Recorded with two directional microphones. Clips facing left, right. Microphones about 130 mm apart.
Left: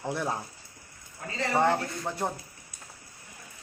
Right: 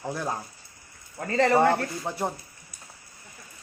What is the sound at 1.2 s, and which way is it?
Speech, 70° right (ahead or behind).